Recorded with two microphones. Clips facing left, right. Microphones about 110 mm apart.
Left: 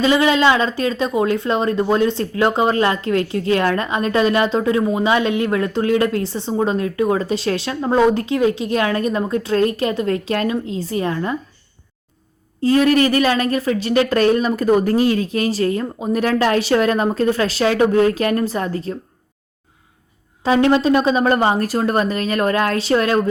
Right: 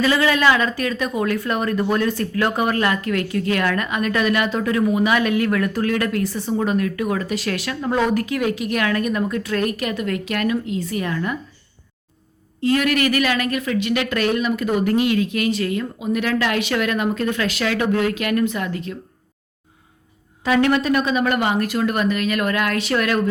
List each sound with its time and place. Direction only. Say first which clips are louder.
0.0 s speech: left 3 dB; 20° left (ahead or behind)
12.6 s speech: left 4 dB; 30° left (ahead or behind)
20.4 s speech: left 3 dB; 30° left (ahead or behind)